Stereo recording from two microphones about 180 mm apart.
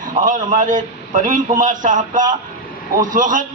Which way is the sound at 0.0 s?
45° right (ahead or behind).